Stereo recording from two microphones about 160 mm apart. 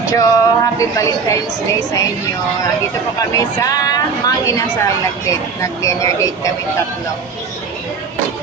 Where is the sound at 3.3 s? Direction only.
20° left (ahead or behind).